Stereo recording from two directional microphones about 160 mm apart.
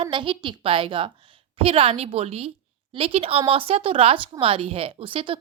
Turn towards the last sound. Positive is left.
turn(degrees=-35)  # may be behind; listen again after turning